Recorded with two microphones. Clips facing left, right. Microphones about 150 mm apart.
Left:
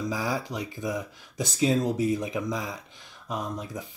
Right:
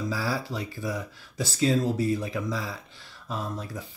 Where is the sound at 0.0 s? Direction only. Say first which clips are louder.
Even; 20° left (ahead or behind).